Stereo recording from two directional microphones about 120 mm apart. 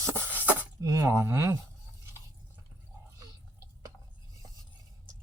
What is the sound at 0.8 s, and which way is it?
Speech, 25° right (ahead or behind).